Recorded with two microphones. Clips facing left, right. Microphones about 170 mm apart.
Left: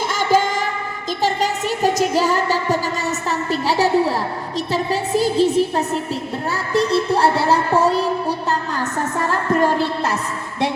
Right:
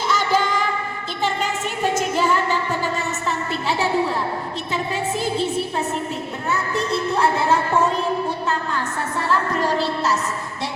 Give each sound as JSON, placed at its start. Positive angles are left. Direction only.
{"t": 0.1, "sound": "music", "side_deg": 50}
{"t": 9.1, "sound": "music", "side_deg": 50}